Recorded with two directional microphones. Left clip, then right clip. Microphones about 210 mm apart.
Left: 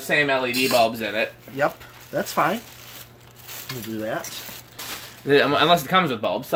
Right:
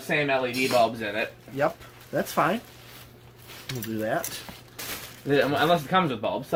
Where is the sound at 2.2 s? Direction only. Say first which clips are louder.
Left 2 dB; 5° right (ahead or behind).